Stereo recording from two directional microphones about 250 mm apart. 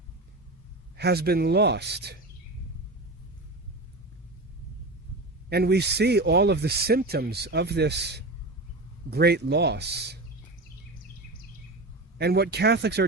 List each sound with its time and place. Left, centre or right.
0.9 s speech: right
5.5 s speech: right
12.1 s speech: right